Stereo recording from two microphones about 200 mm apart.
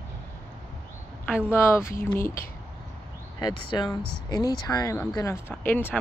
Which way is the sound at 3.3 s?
20° left (ahead or behind).